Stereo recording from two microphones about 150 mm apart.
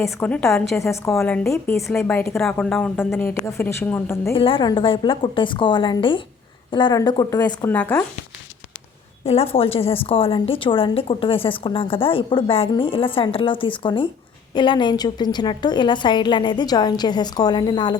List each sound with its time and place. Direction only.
0.0 s speech: 10° left (ahead or behind)
0.8 s a woman's voice: 20° left (ahead or behind)
1.1 s speech: 5° left (ahead or behind)
4.4 s a woman's voice: 35° left (ahead or behind)
7.7 s speech: 10° left (ahead or behind)
9.2 s a woman's voice: 40° left (ahead or behind)